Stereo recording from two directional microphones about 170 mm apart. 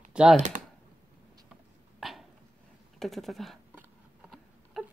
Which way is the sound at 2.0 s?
Centre (ahead or behind).